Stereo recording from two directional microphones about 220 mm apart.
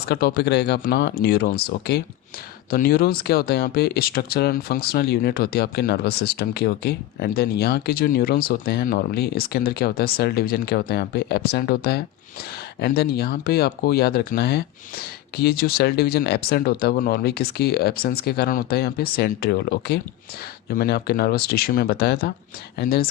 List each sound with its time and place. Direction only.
0.1 s speech: 45° left (ahead or behind)